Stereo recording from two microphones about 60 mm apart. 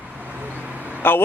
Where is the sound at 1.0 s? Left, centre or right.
Left.